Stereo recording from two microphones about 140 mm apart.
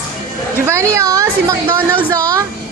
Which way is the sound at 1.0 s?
25° right (ahead or behind).